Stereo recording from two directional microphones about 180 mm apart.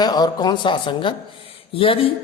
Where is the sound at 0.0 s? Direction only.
20° left (ahead or behind).